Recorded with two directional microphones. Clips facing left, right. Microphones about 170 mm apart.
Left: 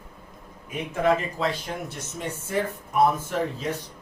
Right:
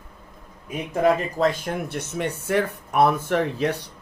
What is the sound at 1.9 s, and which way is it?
Speech, 65° right (ahead or behind).